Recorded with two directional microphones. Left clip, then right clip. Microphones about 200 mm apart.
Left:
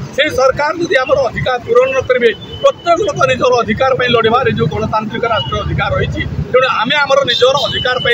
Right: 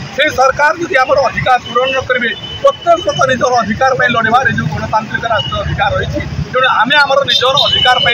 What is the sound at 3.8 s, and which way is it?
Speech, 25° left (ahead or behind).